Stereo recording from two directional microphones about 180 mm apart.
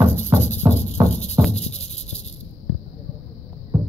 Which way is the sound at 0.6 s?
15° right (ahead or behind).